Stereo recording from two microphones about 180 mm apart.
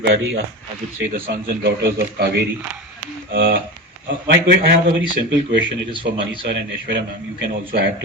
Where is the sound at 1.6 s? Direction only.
65° right (ahead or behind).